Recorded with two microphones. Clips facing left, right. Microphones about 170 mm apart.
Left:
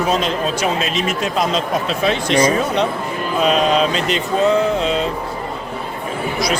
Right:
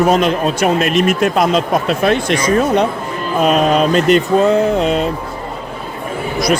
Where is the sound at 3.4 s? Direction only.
50° right (ahead or behind).